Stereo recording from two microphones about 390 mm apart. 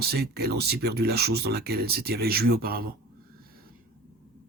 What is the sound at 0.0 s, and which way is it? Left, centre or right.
Speech, right.